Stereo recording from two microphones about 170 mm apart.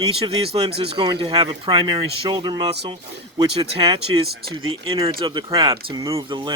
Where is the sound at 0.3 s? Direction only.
35° right (ahead or behind).